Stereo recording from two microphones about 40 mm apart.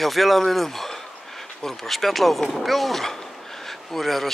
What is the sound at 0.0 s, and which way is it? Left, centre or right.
Speech, centre.